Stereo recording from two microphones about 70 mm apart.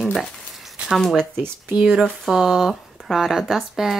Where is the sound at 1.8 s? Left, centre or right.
Centre.